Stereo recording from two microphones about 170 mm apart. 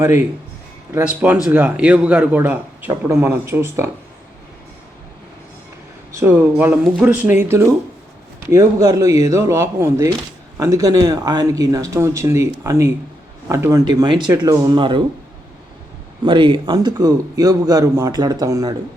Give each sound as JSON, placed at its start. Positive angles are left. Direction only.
{"t": 0.9, "sound": "a man's voice", "side_deg": -10}
{"t": 6.1, "sound": "a man's voice", "side_deg": -15}
{"t": 16.2, "sound": "a man's voice", "side_deg": -30}